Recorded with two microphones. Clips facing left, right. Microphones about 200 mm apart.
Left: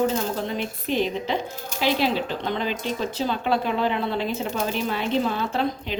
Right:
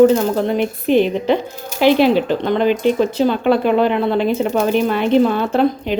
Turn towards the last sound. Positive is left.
turn(degrees=-60)  # may be behind; listen again after turning